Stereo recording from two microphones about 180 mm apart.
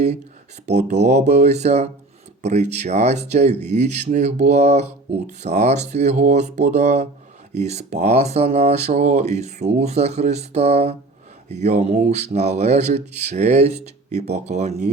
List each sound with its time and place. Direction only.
0.6 s speech: 40° right (ahead or behind)